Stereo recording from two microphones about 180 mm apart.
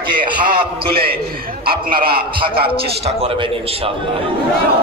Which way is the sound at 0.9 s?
55° right (ahead or behind).